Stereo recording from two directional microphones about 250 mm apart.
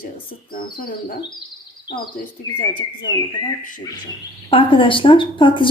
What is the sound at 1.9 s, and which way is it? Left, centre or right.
Speech, left.